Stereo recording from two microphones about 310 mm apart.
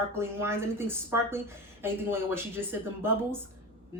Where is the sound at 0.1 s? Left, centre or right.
Centre.